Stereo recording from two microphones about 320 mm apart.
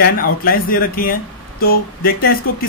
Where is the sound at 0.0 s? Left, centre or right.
Left.